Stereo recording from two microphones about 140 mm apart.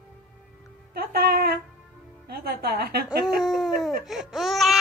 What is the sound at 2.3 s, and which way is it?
Speech, 90° right.